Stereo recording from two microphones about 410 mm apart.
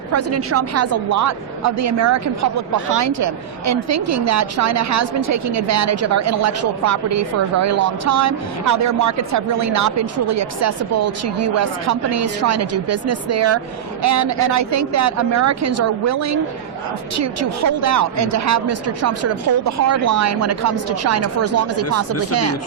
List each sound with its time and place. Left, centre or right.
0.1 s a woman's voice: right